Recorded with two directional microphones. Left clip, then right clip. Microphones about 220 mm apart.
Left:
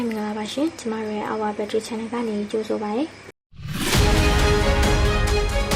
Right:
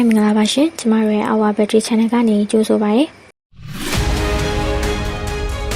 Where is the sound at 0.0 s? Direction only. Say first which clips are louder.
Right 11 dB; 40° right (ahead or behind).